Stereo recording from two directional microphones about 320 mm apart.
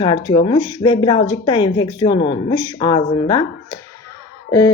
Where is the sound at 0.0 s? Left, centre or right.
Centre.